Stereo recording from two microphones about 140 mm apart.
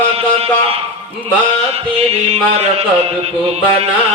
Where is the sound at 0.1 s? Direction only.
45° right (ahead or behind).